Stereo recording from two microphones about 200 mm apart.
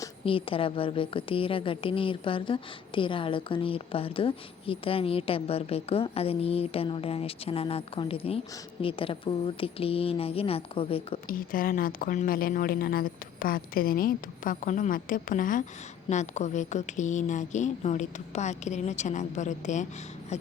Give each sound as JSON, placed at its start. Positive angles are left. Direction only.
{"t": 0.0, "sound": "a woman's voice", "side_deg": 25}
{"t": 11.3, "sound": "speech", "side_deg": 45}